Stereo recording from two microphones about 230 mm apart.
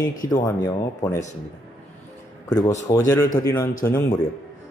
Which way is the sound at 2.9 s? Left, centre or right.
Centre.